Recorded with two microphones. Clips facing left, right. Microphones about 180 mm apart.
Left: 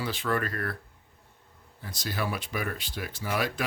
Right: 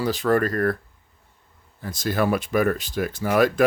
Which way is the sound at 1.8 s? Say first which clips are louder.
Right 10 dB; 50° right (ahead or behind).